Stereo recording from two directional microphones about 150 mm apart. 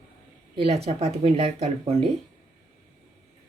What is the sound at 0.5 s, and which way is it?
Speech, 40° right (ahead or behind).